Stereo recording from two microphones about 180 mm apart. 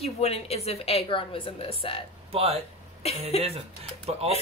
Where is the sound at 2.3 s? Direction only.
35° right (ahead or behind).